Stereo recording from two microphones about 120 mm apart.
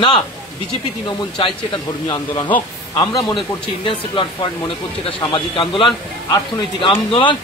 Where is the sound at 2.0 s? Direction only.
35° left (ahead or behind).